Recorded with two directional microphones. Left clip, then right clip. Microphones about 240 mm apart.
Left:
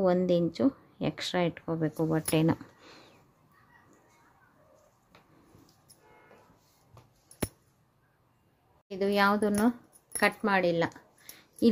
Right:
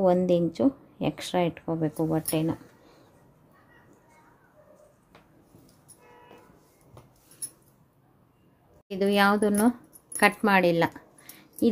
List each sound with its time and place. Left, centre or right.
0.0 s speech: centre
2.4 s a sound: left
8.8 s speech: centre
11.6 s a woman's voice: centre